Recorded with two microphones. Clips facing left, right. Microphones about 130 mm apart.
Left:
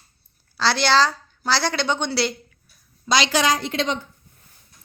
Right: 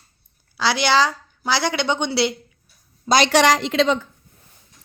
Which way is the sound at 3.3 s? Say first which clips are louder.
Right 5 dB; 75° right (ahead or behind).